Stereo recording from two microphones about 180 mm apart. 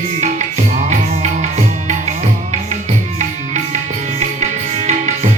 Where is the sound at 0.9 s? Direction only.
40° right (ahead or behind).